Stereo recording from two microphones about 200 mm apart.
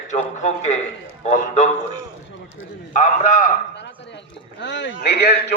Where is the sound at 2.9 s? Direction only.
40° left (ahead or behind).